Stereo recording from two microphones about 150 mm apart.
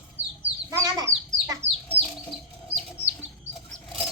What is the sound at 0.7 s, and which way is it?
Chicken, 20° right (ahead or behind).